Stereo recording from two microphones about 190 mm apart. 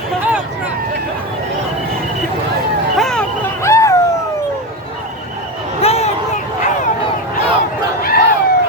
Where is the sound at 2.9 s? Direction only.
Centre (ahead or behind).